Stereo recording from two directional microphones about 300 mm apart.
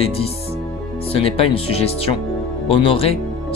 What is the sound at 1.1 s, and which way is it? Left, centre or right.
Speech, centre.